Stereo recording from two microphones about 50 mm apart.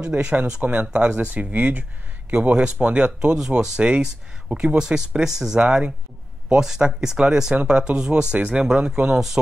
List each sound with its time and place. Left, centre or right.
0.0 s speech: right